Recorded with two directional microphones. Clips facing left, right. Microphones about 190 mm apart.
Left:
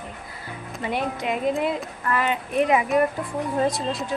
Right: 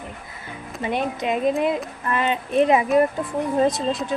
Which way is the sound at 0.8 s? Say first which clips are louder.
Right 2 dB; 20° right (ahead or behind).